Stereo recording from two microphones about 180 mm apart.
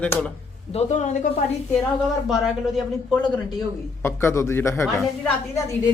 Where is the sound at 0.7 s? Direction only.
40° left (ahead or behind).